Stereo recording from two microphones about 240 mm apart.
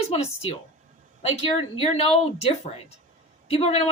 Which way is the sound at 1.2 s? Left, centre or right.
Left.